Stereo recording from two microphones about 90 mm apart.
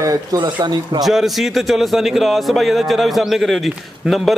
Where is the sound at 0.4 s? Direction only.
55° right (ahead or behind).